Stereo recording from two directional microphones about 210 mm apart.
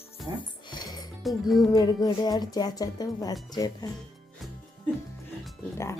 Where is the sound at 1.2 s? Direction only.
Centre (ahead or behind).